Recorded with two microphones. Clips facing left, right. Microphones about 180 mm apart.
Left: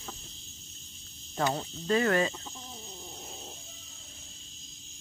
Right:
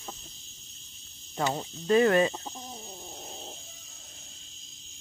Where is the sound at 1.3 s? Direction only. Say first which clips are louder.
Even; 10° right (ahead or behind).